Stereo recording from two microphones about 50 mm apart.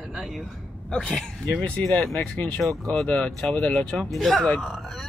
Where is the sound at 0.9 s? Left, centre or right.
Centre.